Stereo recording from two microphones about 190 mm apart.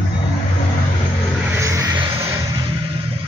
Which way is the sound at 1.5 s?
15° right (ahead or behind).